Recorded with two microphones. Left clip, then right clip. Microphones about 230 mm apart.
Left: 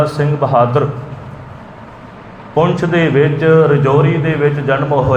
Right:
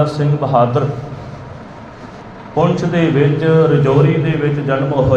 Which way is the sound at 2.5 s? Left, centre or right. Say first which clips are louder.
Left 2 dB; left.